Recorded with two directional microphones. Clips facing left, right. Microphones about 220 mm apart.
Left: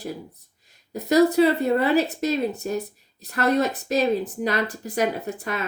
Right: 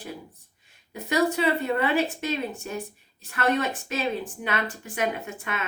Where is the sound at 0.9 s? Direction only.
40° left (ahead or behind).